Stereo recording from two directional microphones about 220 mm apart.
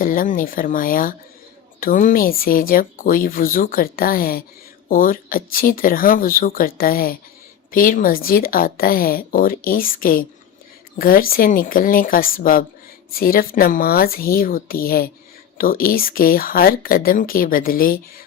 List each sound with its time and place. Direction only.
0.0 s speech: 40° left (ahead or behind)